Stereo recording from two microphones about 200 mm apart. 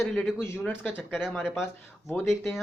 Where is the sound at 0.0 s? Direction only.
Centre (ahead or behind).